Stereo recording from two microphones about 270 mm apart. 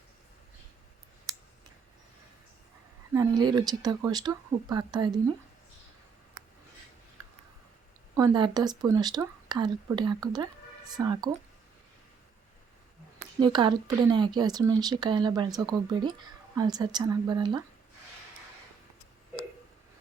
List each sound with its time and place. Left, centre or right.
1.3 s a sound: centre
3.1 s speech: centre
8.1 s speech: centre
13.4 s speech: centre